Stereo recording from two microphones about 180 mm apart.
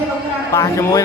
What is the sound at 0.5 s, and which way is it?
Speech, 20° left (ahead or behind).